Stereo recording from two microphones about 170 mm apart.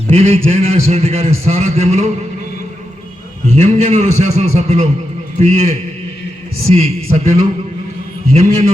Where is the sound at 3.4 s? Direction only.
40° right (ahead or behind).